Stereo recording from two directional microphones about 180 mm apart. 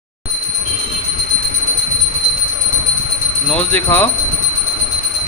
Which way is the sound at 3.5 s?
5° left (ahead or behind).